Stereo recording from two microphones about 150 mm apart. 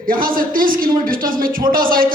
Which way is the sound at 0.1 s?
70° right (ahead or behind).